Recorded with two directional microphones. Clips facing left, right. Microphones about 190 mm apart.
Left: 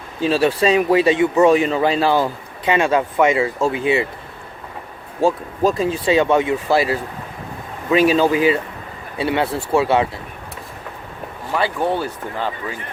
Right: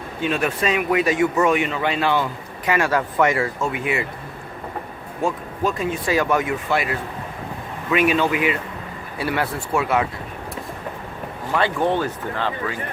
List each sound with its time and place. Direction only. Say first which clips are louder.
0.2 s speech: left 6 dB; 30° left (ahead or behind)
2.7 s speech: left 3 dB; 20° left (ahead or behind)
5.2 s speech: left 6 dB; 35° left (ahead or behind)
11.5 s speech: even; 10° left (ahead or behind)